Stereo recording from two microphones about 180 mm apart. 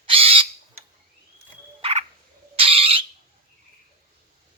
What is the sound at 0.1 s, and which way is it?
Crow, 30° right (ahead or behind).